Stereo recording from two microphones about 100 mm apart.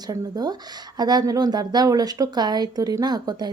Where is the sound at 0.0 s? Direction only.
40° right (ahead or behind).